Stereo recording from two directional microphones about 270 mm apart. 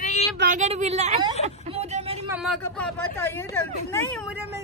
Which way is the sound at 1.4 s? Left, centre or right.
Right.